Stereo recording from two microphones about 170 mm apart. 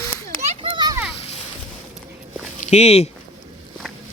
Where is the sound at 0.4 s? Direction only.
40° right (ahead or behind).